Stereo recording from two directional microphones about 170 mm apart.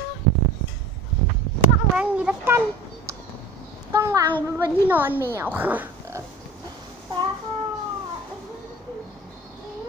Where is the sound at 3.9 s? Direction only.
20° right (ahead or behind).